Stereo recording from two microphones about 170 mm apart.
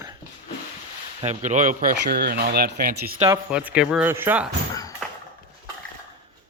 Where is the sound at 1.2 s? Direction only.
45° right (ahead or behind); by 2.9 s 70° right (ahead or behind).